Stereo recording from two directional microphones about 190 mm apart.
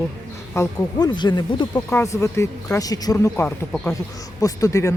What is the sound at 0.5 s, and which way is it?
Speech, 15° left (ahead or behind).